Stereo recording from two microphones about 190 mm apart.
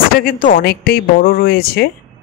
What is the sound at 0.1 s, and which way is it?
Speech, 45° left (ahead or behind).